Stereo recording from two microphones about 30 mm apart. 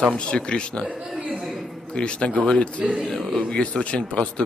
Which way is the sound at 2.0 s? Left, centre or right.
Left.